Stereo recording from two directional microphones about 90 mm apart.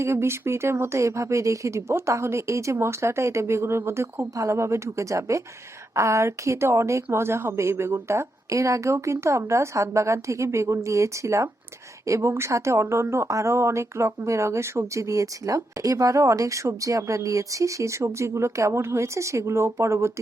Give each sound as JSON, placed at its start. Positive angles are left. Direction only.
{"t": 0.0, "sound": "speech", "side_deg": -30}